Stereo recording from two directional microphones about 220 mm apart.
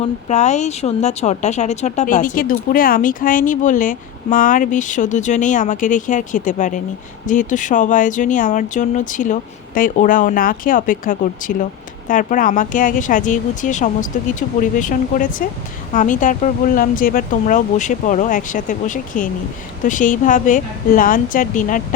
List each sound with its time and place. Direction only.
0.0 s speech: 30° left (ahead or behind)